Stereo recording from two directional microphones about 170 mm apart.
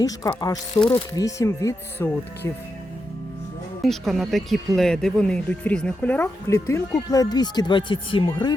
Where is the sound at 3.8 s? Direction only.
Centre (ahead or behind).